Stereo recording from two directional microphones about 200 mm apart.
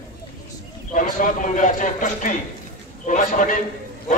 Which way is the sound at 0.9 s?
40° left (ahead or behind).